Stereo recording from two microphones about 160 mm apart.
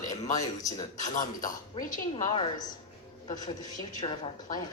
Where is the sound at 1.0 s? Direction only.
55° left (ahead or behind).